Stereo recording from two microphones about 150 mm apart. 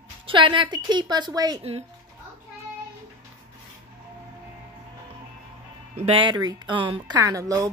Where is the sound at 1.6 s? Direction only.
45° right (ahead or behind).